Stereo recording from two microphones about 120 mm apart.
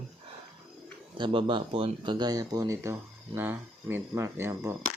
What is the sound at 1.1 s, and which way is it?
Speech, 40° right (ahead or behind).